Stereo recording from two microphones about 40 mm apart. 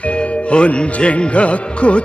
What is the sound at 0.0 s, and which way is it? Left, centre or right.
Speech, left.